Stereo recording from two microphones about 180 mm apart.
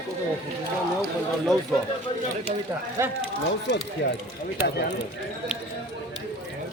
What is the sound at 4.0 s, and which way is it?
Speech, 70° left (ahead or behind).